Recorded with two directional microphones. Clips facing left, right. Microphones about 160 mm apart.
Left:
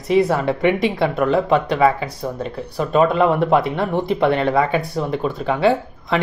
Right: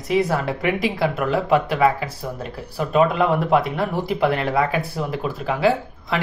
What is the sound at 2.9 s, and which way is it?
Speech, 5° right (ahead or behind).